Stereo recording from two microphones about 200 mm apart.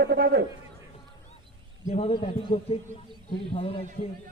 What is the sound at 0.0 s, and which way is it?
Speech, 50° right (ahead or behind).